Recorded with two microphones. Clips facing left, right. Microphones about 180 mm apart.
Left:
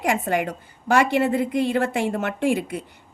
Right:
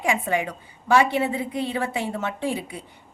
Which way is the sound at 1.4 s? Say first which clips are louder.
Left 5 dB; 90° left.